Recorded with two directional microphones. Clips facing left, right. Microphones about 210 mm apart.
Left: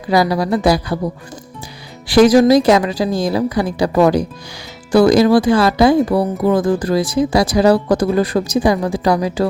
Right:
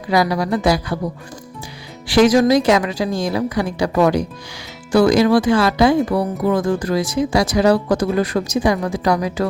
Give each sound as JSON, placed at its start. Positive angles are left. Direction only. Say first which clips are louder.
{"t": 0.1, "sound": "speech", "louder": "left 2 dB", "side_deg": 35}
{"t": 2.0, "sound": "speech", "louder": "left 3 dB", "side_deg": 35}